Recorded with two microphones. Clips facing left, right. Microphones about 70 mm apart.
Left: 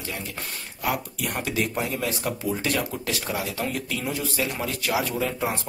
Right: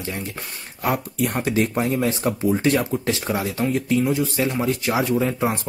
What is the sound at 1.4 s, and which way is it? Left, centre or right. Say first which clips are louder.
Speech: right 4 dB; right.